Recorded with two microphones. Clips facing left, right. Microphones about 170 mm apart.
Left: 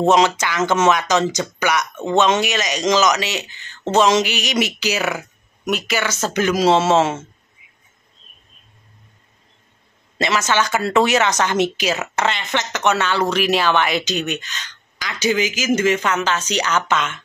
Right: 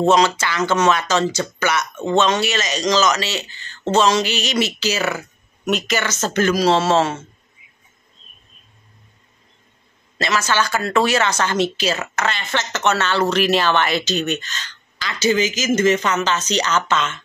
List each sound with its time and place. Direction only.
0.1 s speech: 15° left (ahead or behind)
10.2 s speech: 20° left (ahead or behind)